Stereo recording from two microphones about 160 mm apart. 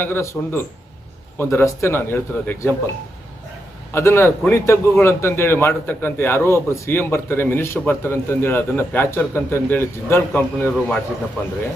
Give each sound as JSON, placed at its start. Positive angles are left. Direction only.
{"t": 0.0, "sound": "a man's voice", "side_deg": 15}
{"t": 3.9, "sound": "a man's voice", "side_deg": 15}